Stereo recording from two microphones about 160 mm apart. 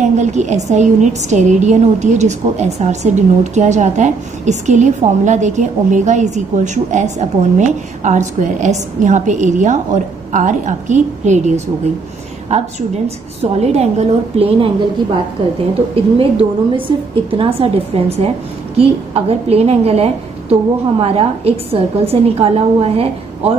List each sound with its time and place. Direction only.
0.0 s a woman's voice: 45° right (ahead or behind)
16.2 s a woman's voice: 35° right (ahead or behind)